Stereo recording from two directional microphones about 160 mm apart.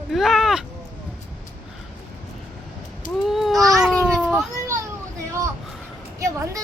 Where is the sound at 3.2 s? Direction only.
Centre (ahead or behind).